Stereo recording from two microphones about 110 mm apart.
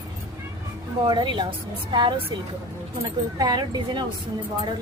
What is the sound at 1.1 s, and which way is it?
A woman's voice, 45° right (ahead or behind).